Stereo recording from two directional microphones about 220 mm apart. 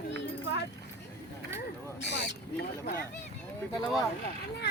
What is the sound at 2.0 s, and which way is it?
Speech, 50° left (ahead or behind).